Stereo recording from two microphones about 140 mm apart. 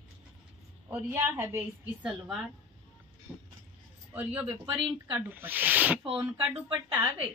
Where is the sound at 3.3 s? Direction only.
15° right (ahead or behind).